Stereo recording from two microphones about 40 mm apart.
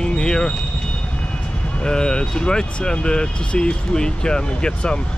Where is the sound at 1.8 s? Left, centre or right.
Left.